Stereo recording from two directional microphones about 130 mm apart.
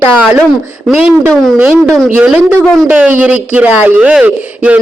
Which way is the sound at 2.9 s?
10° right (ahead or behind).